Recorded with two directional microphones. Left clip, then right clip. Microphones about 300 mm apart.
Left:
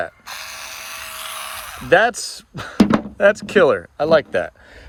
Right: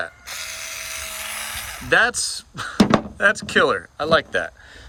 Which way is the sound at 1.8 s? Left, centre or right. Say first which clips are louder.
Left 3 dB; centre.